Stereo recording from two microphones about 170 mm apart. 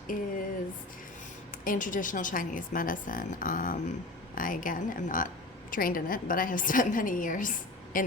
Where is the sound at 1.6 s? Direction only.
50° left (ahead or behind).